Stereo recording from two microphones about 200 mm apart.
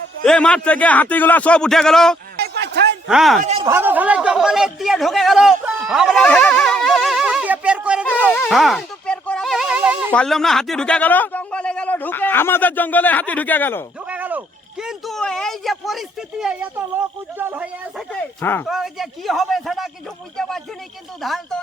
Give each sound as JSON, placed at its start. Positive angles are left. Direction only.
{"t": 0.3, "sound": "speech", "side_deg": 5}
{"t": 2.4, "sound": "a sound", "side_deg": -60}
{"t": 3.1, "sound": "speech", "side_deg": 0}
{"t": 3.6, "sound": "speech", "side_deg": -10}
{"t": 5.9, "sound": "a sound", "side_deg": 0}
{"t": 10.1, "sound": "speech", "side_deg": 5}
{"t": 14.1, "sound": "speech", "side_deg": -10}
{"t": 18.1, "sound": "speech", "side_deg": 5}
{"t": 18.7, "sound": "speech", "side_deg": 0}